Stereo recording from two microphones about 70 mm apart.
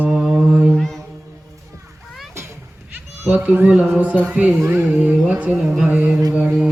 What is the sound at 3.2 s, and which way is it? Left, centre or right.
Speech, right.